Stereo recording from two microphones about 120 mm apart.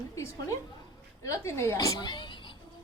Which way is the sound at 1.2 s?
25° left (ahead or behind).